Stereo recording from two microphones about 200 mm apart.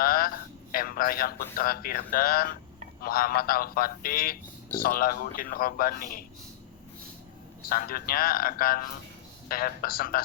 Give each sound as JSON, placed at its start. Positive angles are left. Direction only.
{"t": 0.0, "sound": "a sound", "side_deg": 45}
{"t": 1.5, "sound": "speech", "side_deg": 45}
{"t": 7.7, "sound": "speech", "side_deg": 45}